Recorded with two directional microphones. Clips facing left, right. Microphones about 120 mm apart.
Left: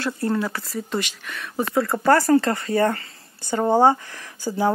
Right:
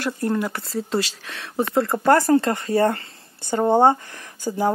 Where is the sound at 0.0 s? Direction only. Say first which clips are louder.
Even; 15° right (ahead or behind).